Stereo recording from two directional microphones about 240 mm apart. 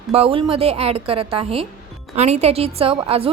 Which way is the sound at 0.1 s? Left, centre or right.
Right.